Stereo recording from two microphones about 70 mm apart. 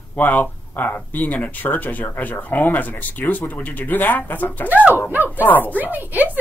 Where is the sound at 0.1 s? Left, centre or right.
Left.